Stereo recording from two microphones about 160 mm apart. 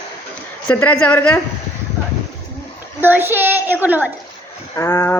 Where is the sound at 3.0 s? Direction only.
15° right (ahead or behind).